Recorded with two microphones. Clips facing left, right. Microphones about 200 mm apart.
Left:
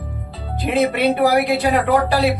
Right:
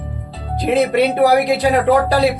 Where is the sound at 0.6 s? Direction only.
35° right (ahead or behind).